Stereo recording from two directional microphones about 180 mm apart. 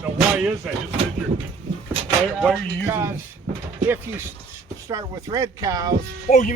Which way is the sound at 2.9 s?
15° right (ahead or behind).